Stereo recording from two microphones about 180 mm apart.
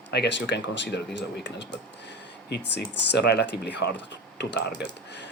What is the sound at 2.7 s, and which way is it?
Speech, 70° left (ahead or behind).